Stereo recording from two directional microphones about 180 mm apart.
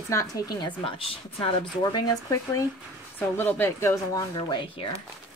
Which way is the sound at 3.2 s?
10° left (ahead or behind).